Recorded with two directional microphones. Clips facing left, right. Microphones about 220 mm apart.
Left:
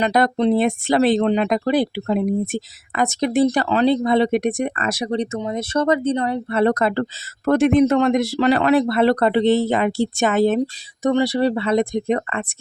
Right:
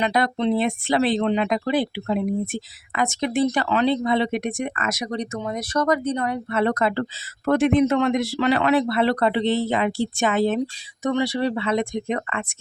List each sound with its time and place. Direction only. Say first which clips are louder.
0.0 s speech: left 4 dB; 40° left (ahead or behind)